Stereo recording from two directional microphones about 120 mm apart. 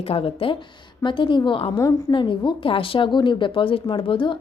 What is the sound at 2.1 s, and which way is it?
A woman's voice, 40° left (ahead or behind).